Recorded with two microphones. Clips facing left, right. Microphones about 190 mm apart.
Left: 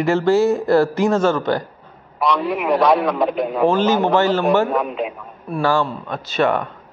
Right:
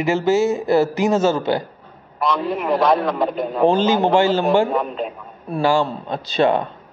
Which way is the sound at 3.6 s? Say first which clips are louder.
Right 1 dB; 15° right (ahead or behind).